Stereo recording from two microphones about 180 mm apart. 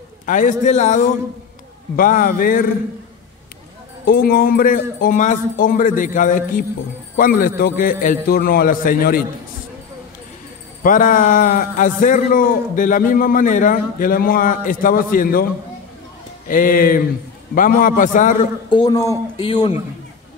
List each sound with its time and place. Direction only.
0.3 s a man's voice: 45° left (ahead or behind)
4.0 s a man's voice: 55° left (ahead or behind)
10.8 s a man's voice: 50° left (ahead or behind)
16.4 s a man's voice: 50° left (ahead or behind)
18.7 s speech: 25° left (ahead or behind)